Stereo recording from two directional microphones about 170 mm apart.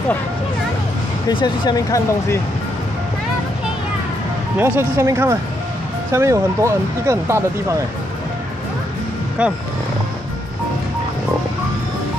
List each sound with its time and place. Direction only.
1.3 s speech: 25° left (ahead or behind)
4.6 s speech: 15° right (ahead or behind)
9.4 s speech: 5° right (ahead or behind)